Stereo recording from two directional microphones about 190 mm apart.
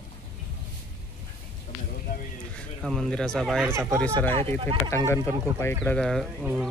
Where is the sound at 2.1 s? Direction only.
55° left (ahead or behind).